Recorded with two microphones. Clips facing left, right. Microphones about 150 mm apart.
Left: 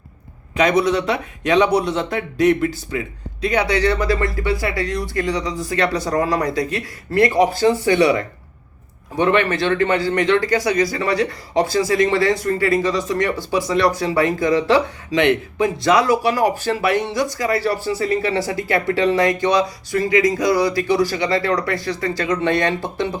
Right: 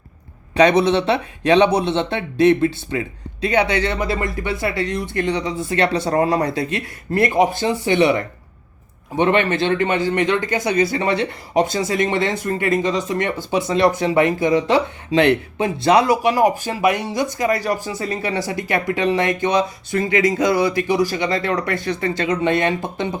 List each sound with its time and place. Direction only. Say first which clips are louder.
0.5 s speech: right 2 dB; 30° right (ahead or behind)
15.1 s speech: right 1 dB; 30° right (ahead or behind)
16.4 s speech: right 2 dB; 15° right (ahead or behind)